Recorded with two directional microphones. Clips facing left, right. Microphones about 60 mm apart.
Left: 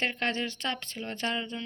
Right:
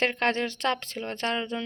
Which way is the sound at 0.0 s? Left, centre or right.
Right.